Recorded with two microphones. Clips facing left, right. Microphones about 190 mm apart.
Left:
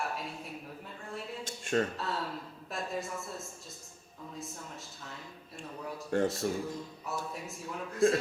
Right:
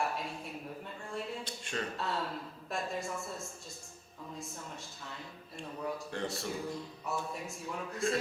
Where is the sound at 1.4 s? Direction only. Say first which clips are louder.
Left 8 dB; 50° left (ahead or behind).